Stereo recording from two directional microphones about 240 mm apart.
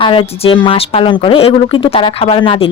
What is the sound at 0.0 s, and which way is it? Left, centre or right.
Speech, left.